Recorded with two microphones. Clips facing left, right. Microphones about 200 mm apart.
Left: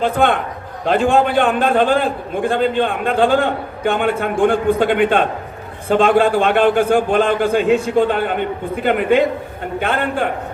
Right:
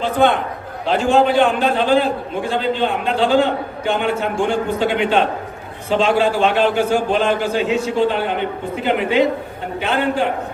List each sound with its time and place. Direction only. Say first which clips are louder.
0.0 s a man's voice: even; 55° left (ahead or behind)